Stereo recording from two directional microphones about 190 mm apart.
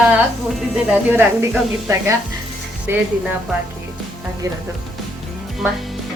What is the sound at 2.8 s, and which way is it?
Speech, 10° right (ahead or behind).